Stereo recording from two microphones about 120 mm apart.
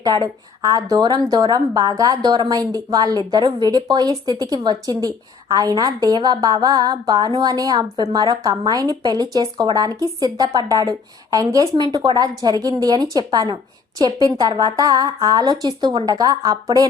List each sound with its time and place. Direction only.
0.0 s a woman's voice: 35° right (ahead or behind)